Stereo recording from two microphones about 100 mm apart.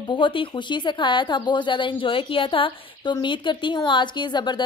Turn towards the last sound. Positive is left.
turn(degrees=50)  # may be behind; listen again after turning